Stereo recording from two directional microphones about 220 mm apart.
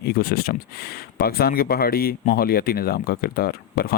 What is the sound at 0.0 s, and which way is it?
Speech, 45° left (ahead or behind).